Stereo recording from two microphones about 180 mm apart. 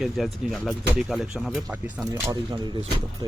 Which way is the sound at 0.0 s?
Centre (ahead or behind).